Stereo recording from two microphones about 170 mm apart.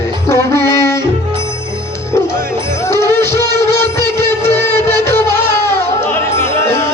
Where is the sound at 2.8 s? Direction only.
15° left (ahead or behind).